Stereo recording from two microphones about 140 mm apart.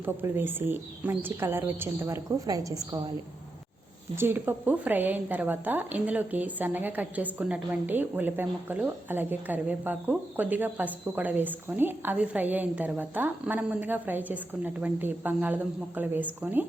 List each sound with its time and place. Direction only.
0.0 s speech: 15° right (ahead or behind)
4.1 s speech: 15° right (ahead or behind)